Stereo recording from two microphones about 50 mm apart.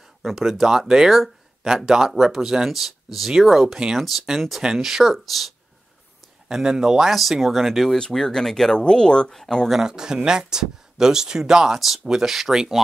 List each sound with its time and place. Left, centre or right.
0.2 s speech: centre
6.5 s speech: centre
7.1 s speech: centre
9.8 s speech: centre